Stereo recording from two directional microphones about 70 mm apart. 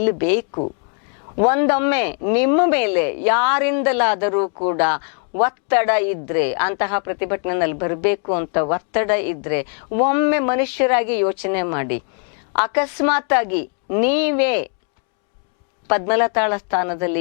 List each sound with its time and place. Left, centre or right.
0.0 s a woman's voice: centre
15.9 s a woman's voice: centre